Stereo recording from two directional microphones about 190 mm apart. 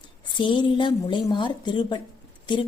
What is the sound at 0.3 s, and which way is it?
A woman's voice, 25° left (ahead or behind).